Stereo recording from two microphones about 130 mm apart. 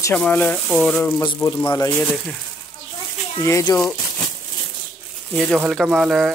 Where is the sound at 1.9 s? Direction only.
10° left (ahead or behind).